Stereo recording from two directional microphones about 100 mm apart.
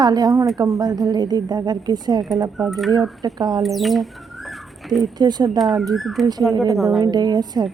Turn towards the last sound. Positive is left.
turn(degrees=-40)  # may be behind; listen again after turning